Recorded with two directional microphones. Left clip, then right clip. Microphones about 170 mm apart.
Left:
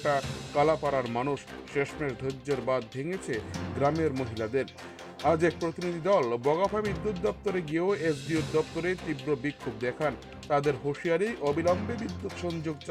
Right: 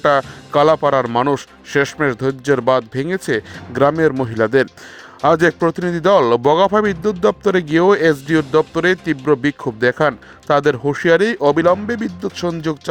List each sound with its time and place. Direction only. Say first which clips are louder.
0.0 s speech: right 14 dB; 60° right (ahead or behind)